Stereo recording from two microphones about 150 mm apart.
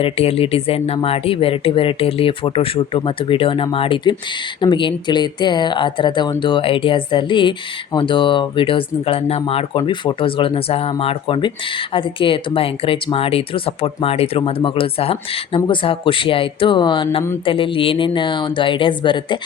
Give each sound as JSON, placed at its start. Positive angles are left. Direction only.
{"t": 0.0, "sound": "speech", "side_deg": 40}